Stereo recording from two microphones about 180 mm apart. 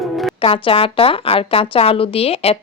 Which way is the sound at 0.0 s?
Centre (ahead or behind).